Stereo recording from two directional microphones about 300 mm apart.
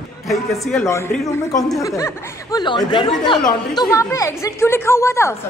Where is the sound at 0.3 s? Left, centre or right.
Centre.